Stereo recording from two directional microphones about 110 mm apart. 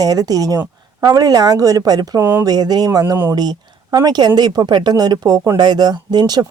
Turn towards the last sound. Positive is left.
turn(degrees=-35)  # may be behind; listen again after turning